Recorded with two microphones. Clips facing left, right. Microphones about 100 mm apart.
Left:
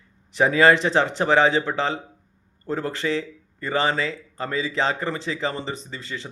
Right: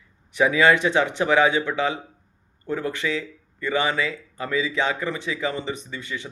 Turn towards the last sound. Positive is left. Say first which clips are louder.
# right 1 dB
turn(degrees=30)  # may be behind; listen again after turning